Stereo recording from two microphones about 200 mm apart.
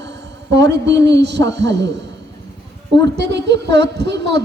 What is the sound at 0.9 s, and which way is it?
A woman's voice, 60° right (ahead or behind).